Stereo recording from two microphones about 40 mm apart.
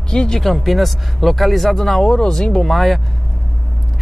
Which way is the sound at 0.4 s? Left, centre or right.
Centre.